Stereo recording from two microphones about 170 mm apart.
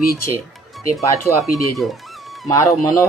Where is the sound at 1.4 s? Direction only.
Centre (ahead or behind).